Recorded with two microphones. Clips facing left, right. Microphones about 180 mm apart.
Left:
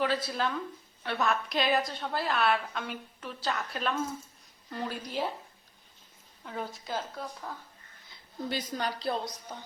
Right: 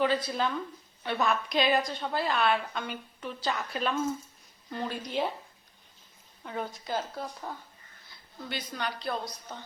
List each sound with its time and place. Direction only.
0.0 s a woman's voice: 5° left (ahead or behind)
6.4 s a woman's voice: centre (ahead or behind)
8.4 s speech: 40° left (ahead or behind)
9.5 s music: 10° left (ahead or behind)